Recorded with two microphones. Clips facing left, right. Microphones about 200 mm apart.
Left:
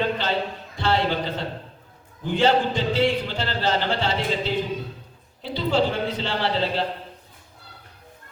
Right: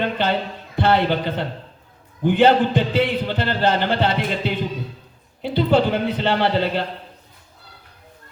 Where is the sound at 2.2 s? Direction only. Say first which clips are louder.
Right 5 dB; 60° right (ahead or behind).